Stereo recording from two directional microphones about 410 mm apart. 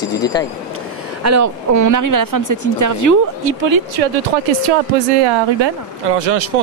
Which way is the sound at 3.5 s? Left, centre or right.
Right.